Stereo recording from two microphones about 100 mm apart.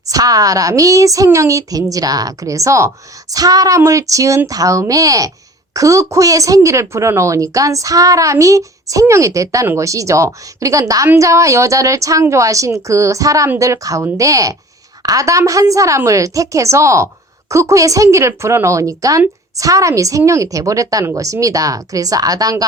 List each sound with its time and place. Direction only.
0.1 s speech: 40° right (ahead or behind)